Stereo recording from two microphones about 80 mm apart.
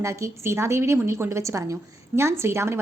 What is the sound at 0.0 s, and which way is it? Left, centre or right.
A woman's voice, right.